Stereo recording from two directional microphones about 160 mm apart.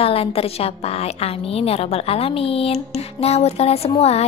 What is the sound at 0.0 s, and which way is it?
A woman's voice, 35° left (ahead or behind).